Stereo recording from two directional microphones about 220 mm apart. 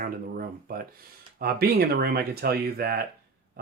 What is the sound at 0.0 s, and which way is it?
Speech, 40° right (ahead or behind).